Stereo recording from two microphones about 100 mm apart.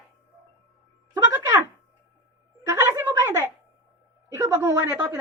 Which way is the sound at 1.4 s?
45° right (ahead or behind).